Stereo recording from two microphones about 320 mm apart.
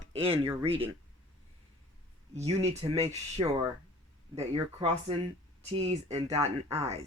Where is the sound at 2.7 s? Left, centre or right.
Centre.